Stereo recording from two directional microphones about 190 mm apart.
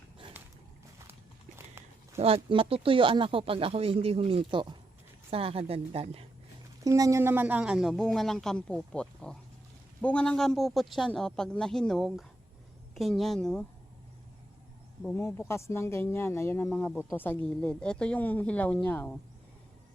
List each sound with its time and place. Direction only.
2.1 s a woman's voice: 30° right (ahead or behind)
6.8 s speech: 20° right (ahead or behind); by 13.7 s 5° left (ahead or behind)
15.0 s speech: 10° left (ahead or behind)